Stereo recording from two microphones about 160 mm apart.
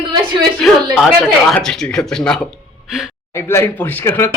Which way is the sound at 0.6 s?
Centre (ahead or behind).